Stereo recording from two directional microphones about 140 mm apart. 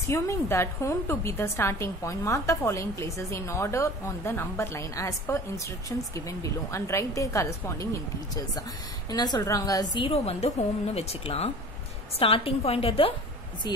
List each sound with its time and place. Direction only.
0.0 s a woman's voice: 20° left (ahead or behind)
10.0 s a woman's voice: 45° left (ahead or behind)